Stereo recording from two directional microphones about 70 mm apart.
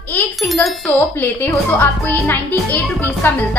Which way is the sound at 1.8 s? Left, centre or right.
Left.